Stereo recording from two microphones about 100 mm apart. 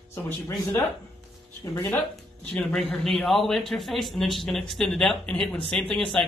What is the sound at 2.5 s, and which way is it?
Speech, 15° left (ahead or behind).